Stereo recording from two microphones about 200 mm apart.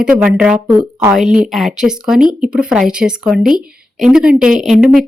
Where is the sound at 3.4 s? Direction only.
45° right (ahead or behind).